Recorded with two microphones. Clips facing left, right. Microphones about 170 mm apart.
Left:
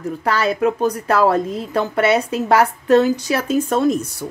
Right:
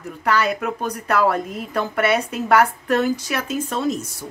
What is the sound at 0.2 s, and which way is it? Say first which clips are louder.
A woman's voice: left 2 dB; 30° left (ahead or behind).